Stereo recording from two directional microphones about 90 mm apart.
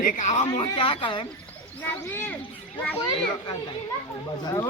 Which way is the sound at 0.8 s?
80° left.